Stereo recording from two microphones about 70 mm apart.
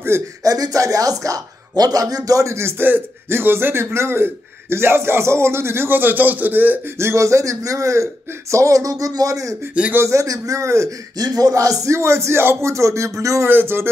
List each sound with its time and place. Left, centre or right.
0.4 s a man's voice: right
2.8 s a man's voice: right
7.0 s a man's voice: right
11.1 s a man's voice: right
13.5 s a man's voice: right